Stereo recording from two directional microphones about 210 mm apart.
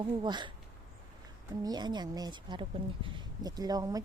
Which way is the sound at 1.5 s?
20° right (ahead or behind).